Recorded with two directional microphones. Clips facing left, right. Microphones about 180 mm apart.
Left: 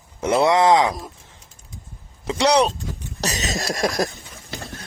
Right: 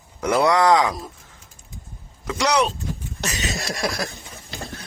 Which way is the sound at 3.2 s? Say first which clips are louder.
Left 3 dB; 40° left (ahead or behind).